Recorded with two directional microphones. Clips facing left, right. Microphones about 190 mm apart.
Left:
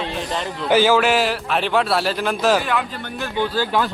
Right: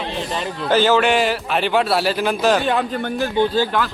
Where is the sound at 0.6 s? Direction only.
10° left (ahead or behind).